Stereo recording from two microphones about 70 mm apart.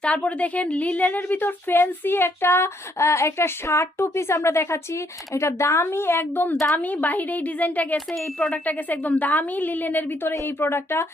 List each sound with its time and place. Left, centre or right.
0.0 s a woman's voice: centre; by 11.0 s left